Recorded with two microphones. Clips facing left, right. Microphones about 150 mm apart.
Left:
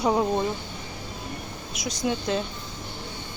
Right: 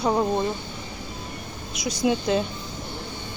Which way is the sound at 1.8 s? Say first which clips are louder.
Right 4 dB; 5° right (ahead or behind).